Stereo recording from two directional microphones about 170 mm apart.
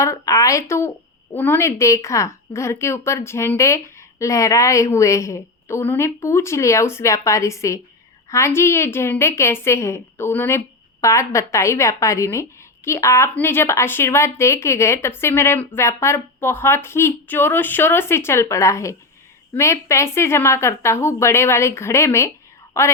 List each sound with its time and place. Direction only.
0.0 s a woman's voice: 20° left (ahead or behind)